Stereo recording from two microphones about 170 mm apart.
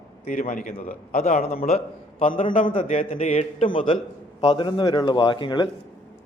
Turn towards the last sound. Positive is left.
turn(degrees=25)  # may be behind; listen again after turning